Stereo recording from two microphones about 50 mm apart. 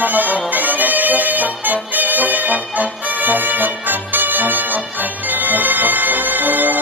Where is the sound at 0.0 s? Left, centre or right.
Right.